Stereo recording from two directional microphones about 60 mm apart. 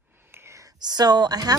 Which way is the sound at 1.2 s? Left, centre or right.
Right.